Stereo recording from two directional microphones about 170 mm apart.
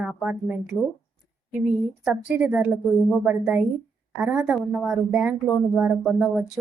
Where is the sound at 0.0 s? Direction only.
5° right (ahead or behind).